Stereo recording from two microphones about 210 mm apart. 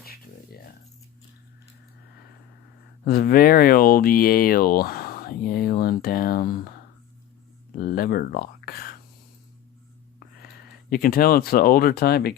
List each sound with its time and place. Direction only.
0.0 s a sound: 45° left (ahead or behind)
3.0 s speech: 45° left (ahead or behind)
7.8 s speech: 45° left (ahead or behind)
10.8 s speech: 45° left (ahead or behind)